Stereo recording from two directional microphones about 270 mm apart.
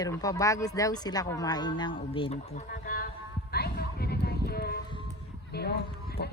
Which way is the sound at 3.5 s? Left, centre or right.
Left.